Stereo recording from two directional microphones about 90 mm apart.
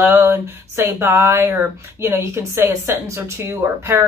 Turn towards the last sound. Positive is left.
turn(degrees=-30)  # may be behind; listen again after turning